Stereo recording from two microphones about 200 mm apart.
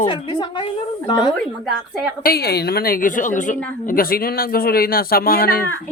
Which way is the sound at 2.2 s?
50° left (ahead or behind).